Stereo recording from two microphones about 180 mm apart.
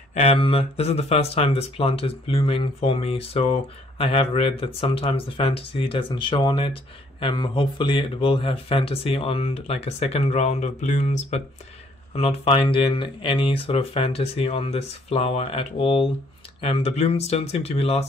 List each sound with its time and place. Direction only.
0.1 s speech: 35° left (ahead or behind)